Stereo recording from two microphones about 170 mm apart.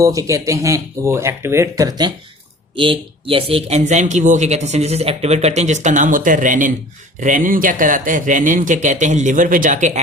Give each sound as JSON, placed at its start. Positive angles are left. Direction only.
{"t": 0.0, "sound": "speech", "side_deg": -20}